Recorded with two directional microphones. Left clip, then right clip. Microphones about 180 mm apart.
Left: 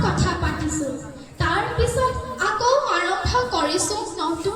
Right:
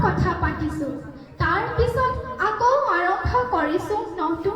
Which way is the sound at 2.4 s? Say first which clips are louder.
Even; 25° right (ahead or behind).